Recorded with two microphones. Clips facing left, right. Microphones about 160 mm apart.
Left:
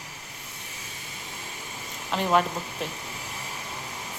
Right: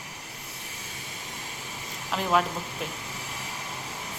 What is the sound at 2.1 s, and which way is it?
Speech, centre (ahead or behind).